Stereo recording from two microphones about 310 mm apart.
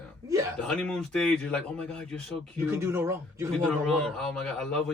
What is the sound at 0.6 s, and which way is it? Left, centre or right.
A man's voice, centre.